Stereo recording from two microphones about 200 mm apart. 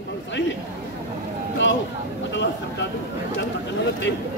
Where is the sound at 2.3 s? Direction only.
60° left (ahead or behind).